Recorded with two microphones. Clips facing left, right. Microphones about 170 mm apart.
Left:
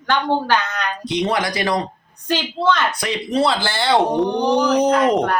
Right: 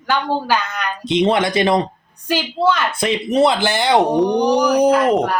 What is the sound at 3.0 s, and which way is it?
Speech, 25° right (ahead or behind).